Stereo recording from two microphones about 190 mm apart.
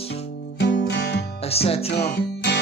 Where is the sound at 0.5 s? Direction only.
65° left (ahead or behind).